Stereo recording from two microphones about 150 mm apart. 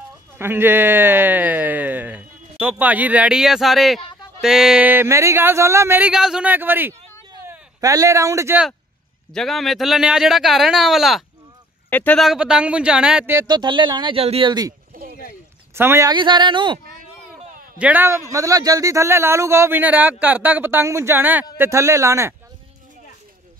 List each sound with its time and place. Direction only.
0.4 s a sound: 15° right (ahead or behind)
2.6 s speech: 10° right (ahead or behind)
9.3 s speech: 5° left (ahead or behind)
11.9 s speech: 10° left (ahead or behind)
12.2 s speech: 5° right (ahead or behind)
13.5 s speech: 30° right (ahead or behind)
15.0 s a sound: 80° right
15.7 s speech: 15° right (ahead or behind)
16.1 s speech: 30° right (ahead or behind)
17.3 s speech: 10° right (ahead or behind)